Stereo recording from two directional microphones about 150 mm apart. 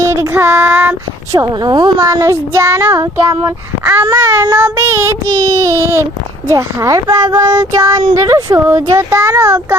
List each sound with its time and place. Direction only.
0.0 s child singing: 15° right (ahead or behind)
1.3 s child singing: 25° right (ahead or behind)